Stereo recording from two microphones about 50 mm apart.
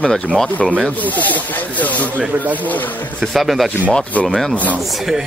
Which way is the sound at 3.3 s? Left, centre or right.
Centre.